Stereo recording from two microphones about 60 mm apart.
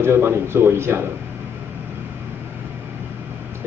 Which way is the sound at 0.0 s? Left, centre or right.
Right.